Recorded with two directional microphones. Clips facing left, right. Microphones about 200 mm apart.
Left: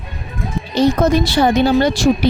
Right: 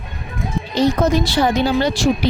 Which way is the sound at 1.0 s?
55° left (ahead or behind).